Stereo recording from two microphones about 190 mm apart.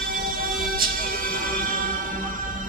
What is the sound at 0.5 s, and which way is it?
Music, 50° right (ahead or behind).